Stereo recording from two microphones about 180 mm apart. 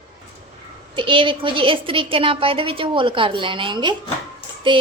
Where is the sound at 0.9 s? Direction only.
30° right (ahead or behind).